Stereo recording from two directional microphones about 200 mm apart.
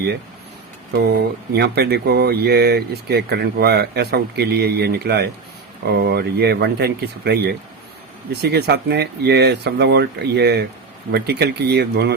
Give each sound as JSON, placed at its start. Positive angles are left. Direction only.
{"t": 1.5, "sound": "speech", "side_deg": -55}